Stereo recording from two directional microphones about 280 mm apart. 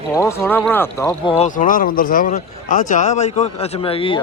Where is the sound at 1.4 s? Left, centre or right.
Left.